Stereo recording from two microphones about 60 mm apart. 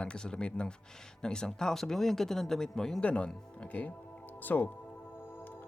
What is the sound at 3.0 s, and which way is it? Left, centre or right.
Speech, centre.